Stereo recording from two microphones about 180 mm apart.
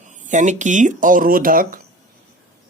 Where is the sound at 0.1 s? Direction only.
40° right (ahead or behind).